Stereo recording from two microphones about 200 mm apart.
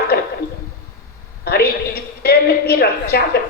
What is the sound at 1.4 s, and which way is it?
A woman's voice, 50° left (ahead or behind).